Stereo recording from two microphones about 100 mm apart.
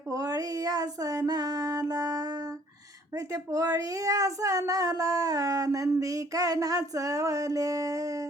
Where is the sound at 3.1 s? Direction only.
35° right (ahead or behind).